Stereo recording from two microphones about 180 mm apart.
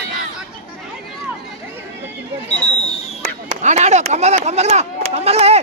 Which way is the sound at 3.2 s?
40° right (ahead or behind).